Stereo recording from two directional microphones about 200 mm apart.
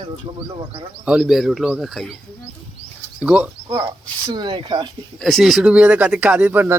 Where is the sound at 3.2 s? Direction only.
5° right (ahead or behind).